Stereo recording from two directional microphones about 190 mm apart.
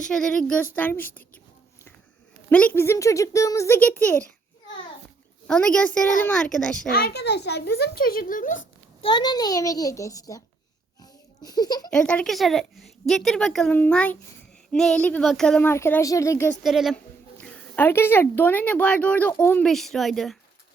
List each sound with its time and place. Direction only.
0.1 s a woman's voice: 5° left (ahead or behind)
2.5 s speech: 10° left (ahead or behind)
5.5 s a woman's voice: 5° left (ahead or behind)
6.9 s a child's voice: 55° left (ahead or behind)
9.0 s a child's voice: 25° left (ahead or behind)
11.4 s a child's voice: 20° left (ahead or behind)
11.9 s a woman's voice: 5° left (ahead or behind)
16.6 s a woman's voice: centre (ahead or behind)
17.4 s a woman's voice: 10° left (ahead or behind)